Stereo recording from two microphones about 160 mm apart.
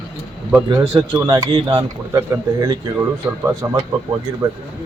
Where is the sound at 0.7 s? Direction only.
25° right (ahead or behind).